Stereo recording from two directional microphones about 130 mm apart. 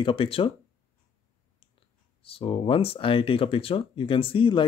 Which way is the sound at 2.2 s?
45° left (ahead or behind).